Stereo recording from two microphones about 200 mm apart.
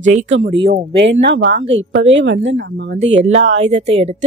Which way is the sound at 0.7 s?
60° right (ahead or behind).